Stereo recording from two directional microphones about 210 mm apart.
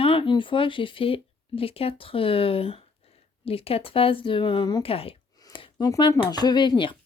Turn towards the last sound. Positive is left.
turn(degrees=20)  # may be behind; listen again after turning